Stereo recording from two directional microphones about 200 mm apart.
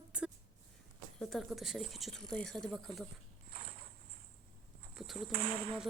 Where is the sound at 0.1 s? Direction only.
5° right (ahead or behind).